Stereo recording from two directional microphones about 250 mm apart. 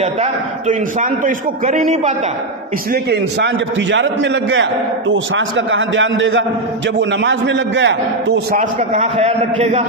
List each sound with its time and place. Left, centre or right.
0.0 s a man's voice: right
2.9 s a man's voice: right
8.5 s a man's voice: right